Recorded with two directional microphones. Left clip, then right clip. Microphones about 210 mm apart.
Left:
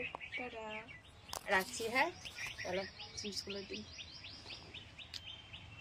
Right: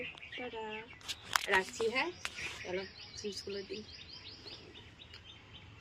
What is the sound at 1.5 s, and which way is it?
Speech, 10° left (ahead or behind).